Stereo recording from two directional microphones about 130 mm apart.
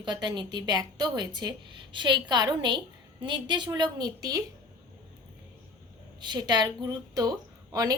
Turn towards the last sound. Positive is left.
turn(degrees=-30)  # may be behind; listen again after turning